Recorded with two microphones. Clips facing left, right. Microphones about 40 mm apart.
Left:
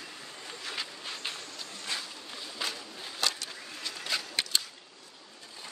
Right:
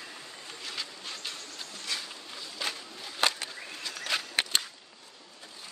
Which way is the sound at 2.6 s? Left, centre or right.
Centre.